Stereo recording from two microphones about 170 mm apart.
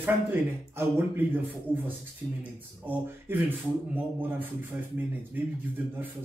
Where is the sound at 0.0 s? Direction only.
10° right (ahead or behind).